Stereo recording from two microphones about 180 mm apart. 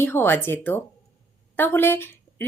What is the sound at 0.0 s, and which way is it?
Speech, 10° left (ahead or behind).